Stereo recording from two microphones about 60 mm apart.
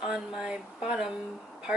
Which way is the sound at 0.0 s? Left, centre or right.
Centre.